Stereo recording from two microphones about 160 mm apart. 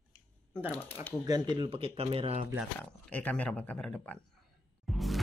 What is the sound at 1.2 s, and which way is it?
Speech, 25° right (ahead or behind).